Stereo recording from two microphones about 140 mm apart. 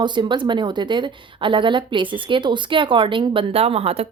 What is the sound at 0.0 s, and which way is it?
A woman's voice, 35° right (ahead or behind).